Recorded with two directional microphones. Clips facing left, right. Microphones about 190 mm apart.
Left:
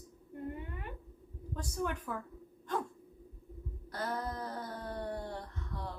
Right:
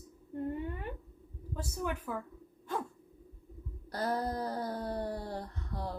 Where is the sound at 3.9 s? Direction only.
35° right (ahead or behind).